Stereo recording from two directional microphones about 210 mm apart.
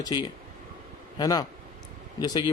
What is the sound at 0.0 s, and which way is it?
A man's voice, 20° left (ahead or behind).